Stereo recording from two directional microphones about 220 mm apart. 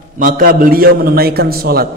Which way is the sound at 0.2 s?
40° right (ahead or behind).